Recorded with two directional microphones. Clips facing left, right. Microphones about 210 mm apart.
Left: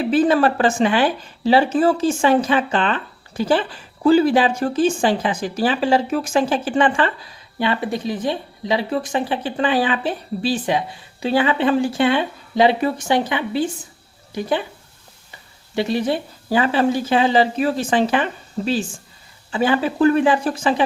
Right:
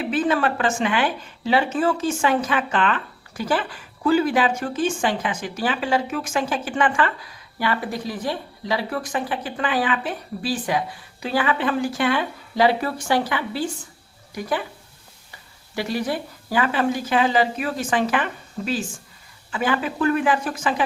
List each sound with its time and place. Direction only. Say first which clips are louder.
0.1 s speech: left 6 dB; 35° left (ahead or behind)
15.7 s speech: left 5 dB; 25° left (ahead or behind)